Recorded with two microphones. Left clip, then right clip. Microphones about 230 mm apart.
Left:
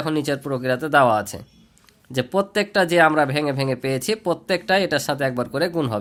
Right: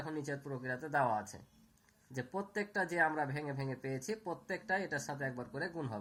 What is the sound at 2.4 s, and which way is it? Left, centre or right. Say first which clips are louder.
Speech: left 17 dB; left.